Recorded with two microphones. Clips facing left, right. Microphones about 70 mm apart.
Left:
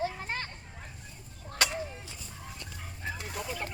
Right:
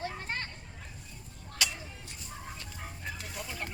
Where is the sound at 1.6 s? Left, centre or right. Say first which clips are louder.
Left 5 dB; left.